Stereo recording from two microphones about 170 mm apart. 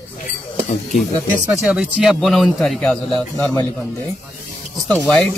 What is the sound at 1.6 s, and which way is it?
A man's voice, 5° right (ahead or behind).